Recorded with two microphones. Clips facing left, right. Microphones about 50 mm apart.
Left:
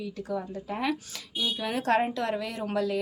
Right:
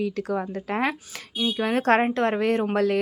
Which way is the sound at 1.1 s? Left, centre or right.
Right.